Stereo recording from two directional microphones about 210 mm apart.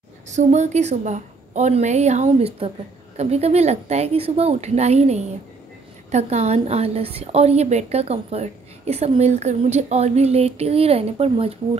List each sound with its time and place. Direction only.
0.3 s a woman's voice: 35° right (ahead or behind)